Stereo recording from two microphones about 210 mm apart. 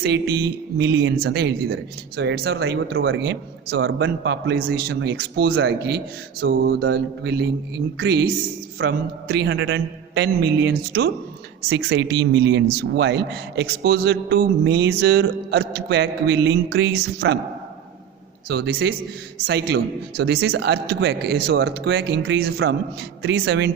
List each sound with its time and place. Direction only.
0.0 s speech: 50° right (ahead or behind)
18.4 s speech: 50° right (ahead or behind)